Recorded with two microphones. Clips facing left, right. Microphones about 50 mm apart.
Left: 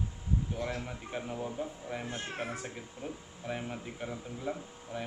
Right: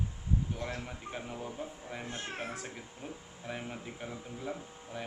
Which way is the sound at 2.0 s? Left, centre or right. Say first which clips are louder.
Right 1 dB; centre.